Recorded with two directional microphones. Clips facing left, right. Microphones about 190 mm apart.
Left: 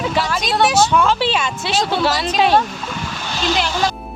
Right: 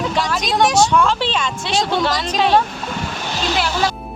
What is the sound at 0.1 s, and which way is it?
A woman's voice, centre (ahead or behind).